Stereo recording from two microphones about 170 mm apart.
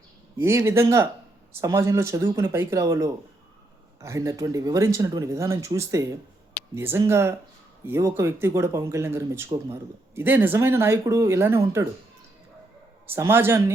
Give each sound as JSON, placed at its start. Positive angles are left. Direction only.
{"t": 0.4, "sound": "speech", "side_deg": -15}
{"t": 13.1, "sound": "speech", "side_deg": -15}